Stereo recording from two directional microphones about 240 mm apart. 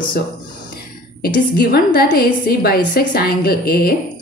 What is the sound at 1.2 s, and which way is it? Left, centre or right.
A woman's voice, left.